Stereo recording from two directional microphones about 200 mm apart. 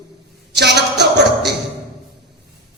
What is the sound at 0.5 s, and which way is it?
Music, 55° right (ahead or behind).